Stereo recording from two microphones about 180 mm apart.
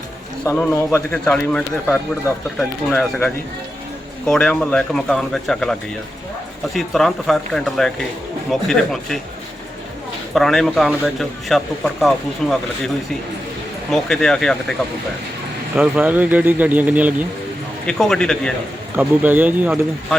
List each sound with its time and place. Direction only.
0.4 s speech: 10° left (ahead or behind)
1.1 s a man's voice: 5° left (ahead or behind)
6.7 s a man's voice: centre (ahead or behind)
10.3 s a man's voice: centre (ahead or behind)
13.9 s a man's voice: 5° left (ahead or behind)
15.7 s speech: 10° right (ahead or behind)
17.8 s a man's voice: 5° left (ahead or behind)
18.9 s speech: 10° right (ahead or behind)